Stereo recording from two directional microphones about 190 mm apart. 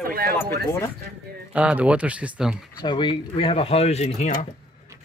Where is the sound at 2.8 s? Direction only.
25° left (ahead or behind).